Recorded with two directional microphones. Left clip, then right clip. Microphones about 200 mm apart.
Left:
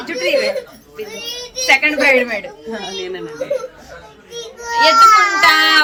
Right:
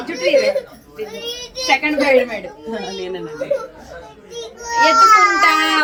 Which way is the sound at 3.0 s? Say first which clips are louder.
Left 1 dB; 20° right (ahead or behind).